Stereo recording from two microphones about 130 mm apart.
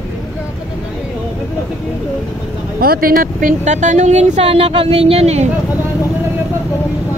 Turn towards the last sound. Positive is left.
turn(degrees=-55)  # may be behind; listen again after turning